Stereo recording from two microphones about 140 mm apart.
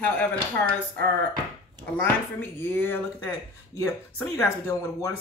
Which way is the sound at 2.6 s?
15° left (ahead or behind).